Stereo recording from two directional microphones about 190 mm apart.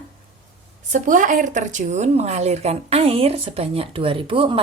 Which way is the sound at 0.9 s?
40° right (ahead or behind).